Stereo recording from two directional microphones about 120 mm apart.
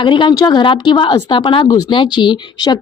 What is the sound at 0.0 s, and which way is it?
Speech, 40° left (ahead or behind).